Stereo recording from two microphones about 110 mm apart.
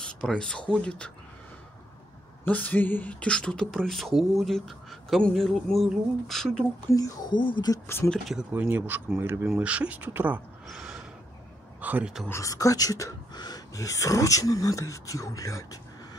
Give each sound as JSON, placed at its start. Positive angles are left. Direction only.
{"t": 0.0, "sound": "speech", "side_deg": 5}
{"t": 2.4, "sound": "speech", "side_deg": 15}
{"t": 6.9, "sound": "speech", "side_deg": 30}
{"t": 7.2, "sound": "speech", "side_deg": 45}
{"t": 7.7, "sound": "speech", "side_deg": 25}
{"t": 8.1, "sound": "speech", "side_deg": 0}
{"t": 8.5, "sound": "speech", "side_deg": -15}
{"t": 10.7, "sound": "gasp", "side_deg": -5}
{"t": 11.8, "sound": "speech", "side_deg": -15}
{"t": 12.3, "sound": "speech", "side_deg": 30}